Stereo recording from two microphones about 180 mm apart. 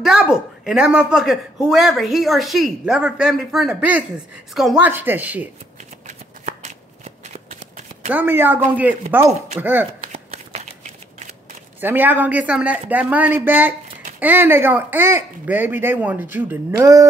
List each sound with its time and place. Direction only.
0.0 s a woman's voice: 5° right (ahead or behind)
6.0 s shuffling cards: 40° right (ahead or behind)
8.1 s speech: 10° right (ahead or behind)
10.0 s shuffling cards: 35° right (ahead or behind)
11.8 s speech: 10° right (ahead or behind)